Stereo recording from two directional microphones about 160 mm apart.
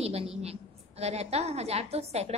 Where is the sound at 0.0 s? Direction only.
40° right (ahead or behind).